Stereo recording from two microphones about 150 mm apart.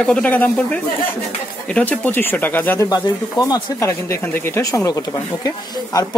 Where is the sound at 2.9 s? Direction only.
25° left (ahead or behind).